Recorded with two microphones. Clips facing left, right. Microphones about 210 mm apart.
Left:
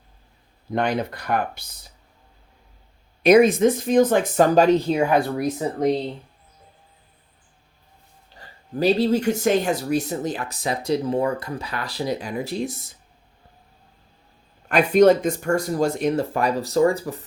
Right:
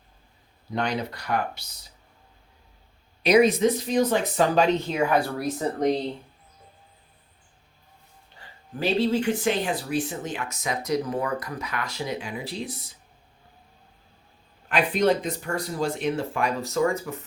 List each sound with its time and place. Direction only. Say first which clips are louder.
0.7 s speech: left 5 dB; 50° left (ahead or behind)
3.2 s speech: left 4 dB; 50° left (ahead or behind)
4.9 s speech: left 3 dB; 25° left (ahead or behind)
5.5 s speech: even; 5° left (ahead or behind)
8.4 s speech: left 7 dB; 40° left (ahead or behind)
14.7 s speech: left 7 dB; 45° left (ahead or behind)